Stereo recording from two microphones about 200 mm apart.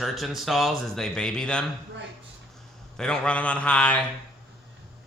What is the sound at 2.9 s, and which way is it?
A man's voice, 5° left (ahead or behind).